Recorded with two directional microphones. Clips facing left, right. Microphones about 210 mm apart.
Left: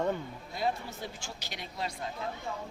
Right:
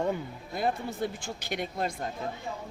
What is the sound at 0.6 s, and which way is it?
Speech, 50° right (ahead or behind).